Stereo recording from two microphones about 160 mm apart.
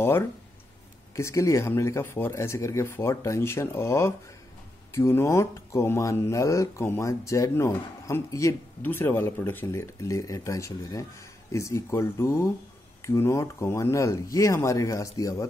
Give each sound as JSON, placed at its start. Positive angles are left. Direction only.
{"t": 1.1, "sound": "speech", "side_deg": 20}